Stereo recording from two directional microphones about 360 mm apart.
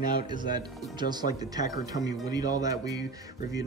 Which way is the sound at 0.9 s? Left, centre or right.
Centre.